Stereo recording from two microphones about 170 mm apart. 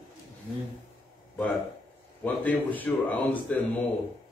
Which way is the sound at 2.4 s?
10° left (ahead or behind).